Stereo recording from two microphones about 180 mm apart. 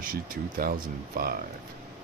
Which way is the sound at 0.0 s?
50° right (ahead or behind).